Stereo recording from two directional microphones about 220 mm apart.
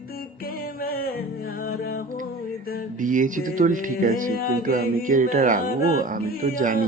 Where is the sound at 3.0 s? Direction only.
35° right (ahead or behind).